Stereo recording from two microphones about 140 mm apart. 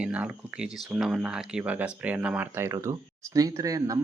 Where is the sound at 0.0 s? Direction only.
10° right (ahead or behind).